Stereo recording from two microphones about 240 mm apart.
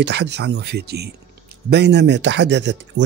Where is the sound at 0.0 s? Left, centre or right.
Right.